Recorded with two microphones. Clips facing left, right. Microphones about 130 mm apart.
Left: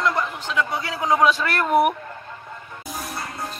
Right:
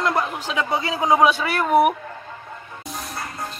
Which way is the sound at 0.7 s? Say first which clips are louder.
Right 6 dB; 20° right (ahead or behind).